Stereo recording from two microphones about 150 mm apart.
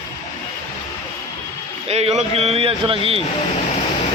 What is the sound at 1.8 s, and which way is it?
A man's voice, 45° right (ahead or behind).